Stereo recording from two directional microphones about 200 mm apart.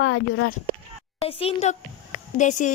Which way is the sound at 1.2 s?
30° left (ahead or behind).